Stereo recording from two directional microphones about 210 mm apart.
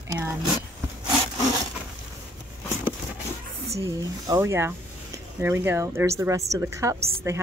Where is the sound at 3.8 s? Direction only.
15° right (ahead or behind).